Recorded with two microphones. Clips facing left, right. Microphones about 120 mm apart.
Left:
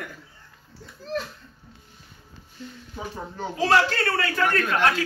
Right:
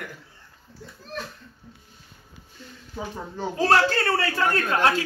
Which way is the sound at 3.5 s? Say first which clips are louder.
Right 1 dB; 40° right (ahead or behind).